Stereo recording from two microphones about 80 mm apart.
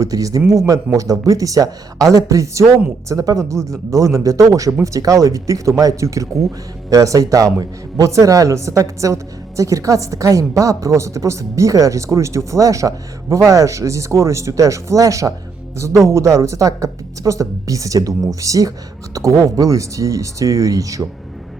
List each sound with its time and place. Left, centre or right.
0.0 s a woman's voice: right